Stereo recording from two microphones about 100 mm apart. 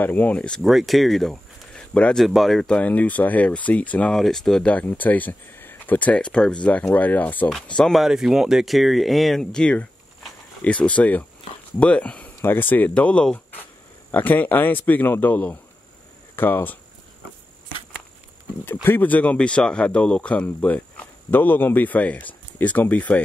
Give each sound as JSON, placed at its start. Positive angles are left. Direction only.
{"t": 0.0, "sound": "speech", "side_deg": 20}
{"t": 0.6, "sound": "speech", "side_deg": 0}
{"t": 2.2, "sound": "speech", "side_deg": 0}
{"t": 18.9, "sound": "speech", "side_deg": 15}